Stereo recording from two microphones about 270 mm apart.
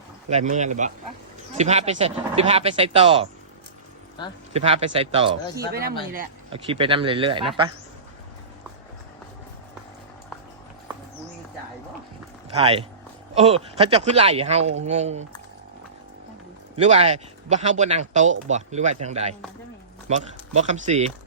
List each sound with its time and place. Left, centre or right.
0.3 s speech: right
4.5 s speech: right
12.5 s speech: right
16.7 s speech: right